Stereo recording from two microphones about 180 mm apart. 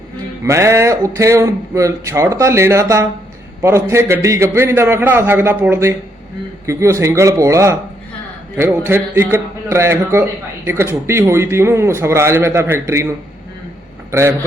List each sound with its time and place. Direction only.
0.4 s speech: 15° right (ahead or behind)
14.1 s speech: 15° right (ahead or behind)